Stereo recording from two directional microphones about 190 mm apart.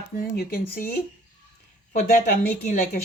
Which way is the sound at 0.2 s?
50° left (ahead or behind).